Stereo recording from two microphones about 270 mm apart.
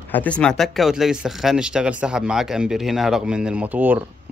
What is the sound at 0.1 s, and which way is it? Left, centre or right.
Speech, centre.